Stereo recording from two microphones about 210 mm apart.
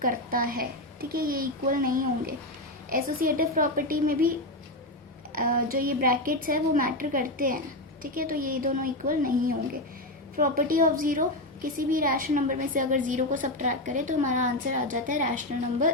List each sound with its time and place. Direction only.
0.0 s a woman's voice: 40° right (ahead or behind)
5.3 s a woman's voice: 40° right (ahead or behind)
10.3 s a woman's voice: 40° right (ahead or behind)